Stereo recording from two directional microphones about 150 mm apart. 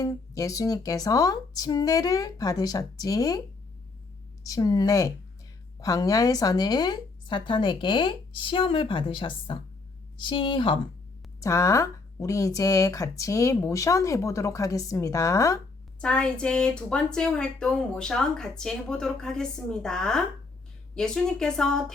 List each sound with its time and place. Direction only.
0.0 s speech: 25° left (ahead or behind)
4.4 s speech: 25° left (ahead or behind)
11.3 s speech: 20° left (ahead or behind)
16.0 s speech: 5° left (ahead or behind)